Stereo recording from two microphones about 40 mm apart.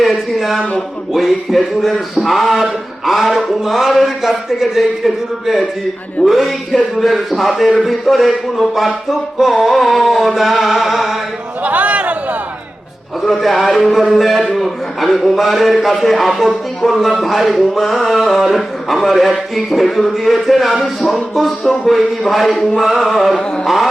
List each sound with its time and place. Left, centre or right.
0.3 s a sound: centre
1.1 s speech: centre
10.3 s speech: centre
11.6 s speech: right
13.2 s speech: centre